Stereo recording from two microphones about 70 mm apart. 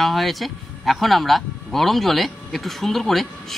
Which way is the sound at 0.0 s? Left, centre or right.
Centre.